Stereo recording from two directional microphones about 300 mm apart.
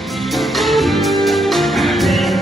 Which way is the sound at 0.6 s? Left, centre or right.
Centre.